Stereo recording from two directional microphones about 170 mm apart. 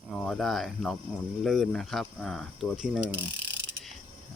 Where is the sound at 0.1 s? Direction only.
Centre (ahead or behind).